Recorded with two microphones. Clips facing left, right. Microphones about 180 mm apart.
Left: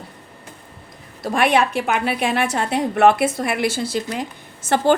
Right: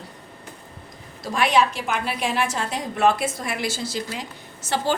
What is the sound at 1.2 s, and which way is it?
A woman's voice, 55° left (ahead or behind).